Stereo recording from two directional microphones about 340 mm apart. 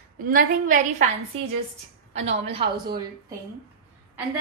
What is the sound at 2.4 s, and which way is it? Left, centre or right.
Speech, centre.